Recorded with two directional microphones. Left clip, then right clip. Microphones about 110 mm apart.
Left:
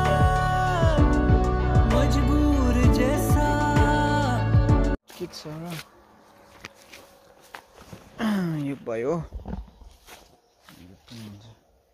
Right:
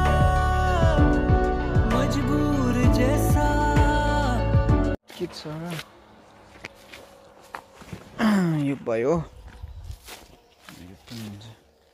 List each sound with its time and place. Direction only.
0.0 s music: centre (ahead or behind)
5.4 s speech: 10° left (ahead or behind)
6.6 s walk: 50° left (ahead or behind)
7.5 s walk: 15° left (ahead or behind)
8.2 s a sound: 25° right (ahead or behind)
8.8 s speech: 20° right (ahead or behind)
11.1 s speech: 55° right (ahead or behind)